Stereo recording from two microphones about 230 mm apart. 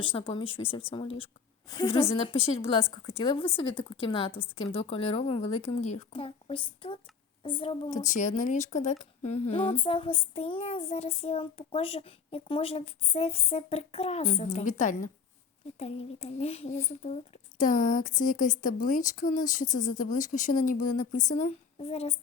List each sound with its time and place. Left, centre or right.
0.0 s speech: left